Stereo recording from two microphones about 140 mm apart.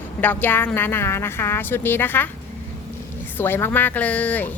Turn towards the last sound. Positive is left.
turn(degrees=10)  # may be behind; listen again after turning